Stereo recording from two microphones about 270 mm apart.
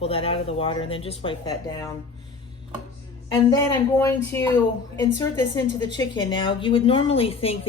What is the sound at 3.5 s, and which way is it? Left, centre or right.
A woman's voice, centre.